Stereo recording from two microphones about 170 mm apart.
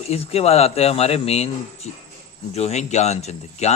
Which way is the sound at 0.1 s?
35° left (ahead or behind).